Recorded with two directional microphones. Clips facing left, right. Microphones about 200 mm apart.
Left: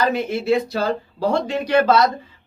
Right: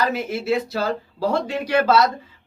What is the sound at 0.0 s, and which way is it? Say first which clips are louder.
Speech: left 3 dB; 5° right (ahead or behind).